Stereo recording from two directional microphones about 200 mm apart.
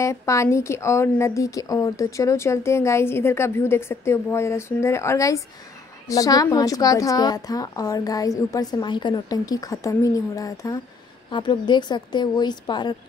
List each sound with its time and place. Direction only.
0.0 s a woman's voice: 15° left (ahead or behind)